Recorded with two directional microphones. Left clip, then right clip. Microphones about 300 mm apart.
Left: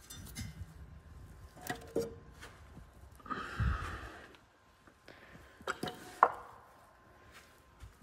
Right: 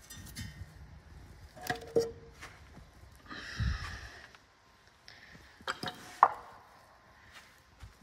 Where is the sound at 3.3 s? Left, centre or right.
Centre.